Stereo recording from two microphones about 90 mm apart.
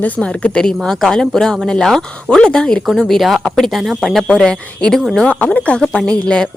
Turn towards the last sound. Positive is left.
turn(degrees=10)  # may be behind; listen again after turning